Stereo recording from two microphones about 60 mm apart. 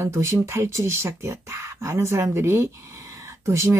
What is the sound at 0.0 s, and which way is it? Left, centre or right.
Speech, right.